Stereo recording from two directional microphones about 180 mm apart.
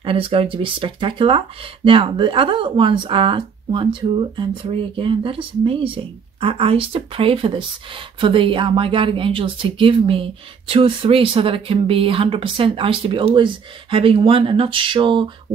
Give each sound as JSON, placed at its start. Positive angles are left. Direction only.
{"t": 0.0, "sound": "speech", "side_deg": -30}